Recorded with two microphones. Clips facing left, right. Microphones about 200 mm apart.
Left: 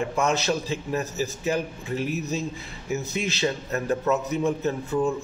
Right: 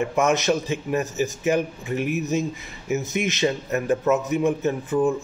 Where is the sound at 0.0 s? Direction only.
20° right (ahead or behind).